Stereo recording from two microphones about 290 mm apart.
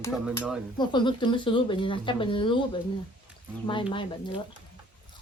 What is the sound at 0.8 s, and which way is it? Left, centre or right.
A woman's voice, centre.